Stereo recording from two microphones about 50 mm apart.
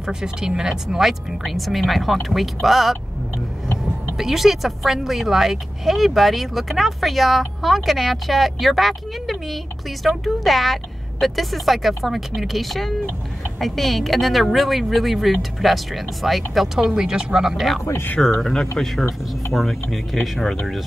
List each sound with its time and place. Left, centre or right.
0.0 s speech: centre
4.2 s speech: centre
18.2 s speech: centre